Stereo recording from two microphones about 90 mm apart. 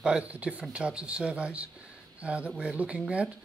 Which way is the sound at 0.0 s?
15° right (ahead or behind).